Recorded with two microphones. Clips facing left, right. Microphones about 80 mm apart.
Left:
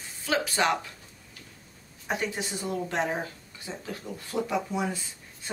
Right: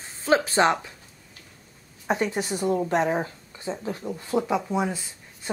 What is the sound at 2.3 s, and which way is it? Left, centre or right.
Speech, right.